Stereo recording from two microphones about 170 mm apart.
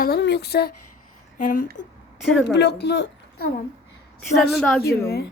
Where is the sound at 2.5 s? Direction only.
85° left.